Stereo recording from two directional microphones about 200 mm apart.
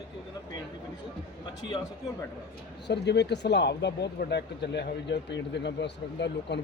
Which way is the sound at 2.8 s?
60° left (ahead or behind).